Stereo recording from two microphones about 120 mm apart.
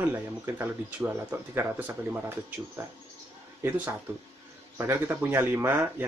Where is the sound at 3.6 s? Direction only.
15° right (ahead or behind).